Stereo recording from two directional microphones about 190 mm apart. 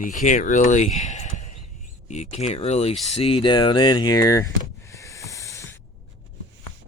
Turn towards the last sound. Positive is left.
turn(degrees=15)  # may be behind; listen again after turning